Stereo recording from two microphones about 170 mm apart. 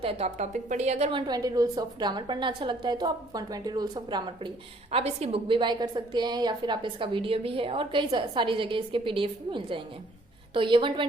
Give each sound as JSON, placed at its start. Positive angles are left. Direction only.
{"t": 0.0, "sound": "a woman's voice", "side_deg": -35}
{"t": 1.3, "sound": "a woman's voice", "side_deg": -20}
{"t": 4.9, "sound": "a woman's voice", "side_deg": -35}